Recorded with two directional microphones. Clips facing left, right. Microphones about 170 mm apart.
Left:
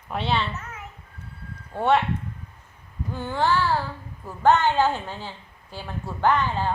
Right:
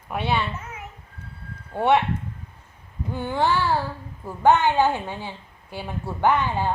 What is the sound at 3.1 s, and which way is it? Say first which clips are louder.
A child's voice: right 1 dB; 15° right (ahead or behind).